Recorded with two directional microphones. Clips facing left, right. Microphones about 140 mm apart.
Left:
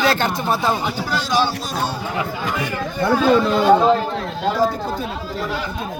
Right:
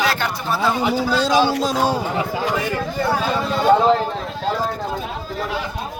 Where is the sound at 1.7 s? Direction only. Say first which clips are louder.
Right 5 dB; 90° right.